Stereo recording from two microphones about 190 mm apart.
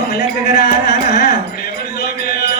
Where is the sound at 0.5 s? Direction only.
55° left (ahead or behind).